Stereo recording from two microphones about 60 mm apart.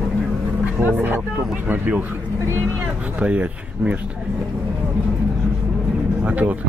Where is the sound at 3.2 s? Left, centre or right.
Right.